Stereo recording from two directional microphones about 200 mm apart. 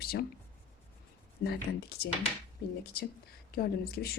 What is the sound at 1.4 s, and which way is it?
A woman's voice, 55° left (ahead or behind).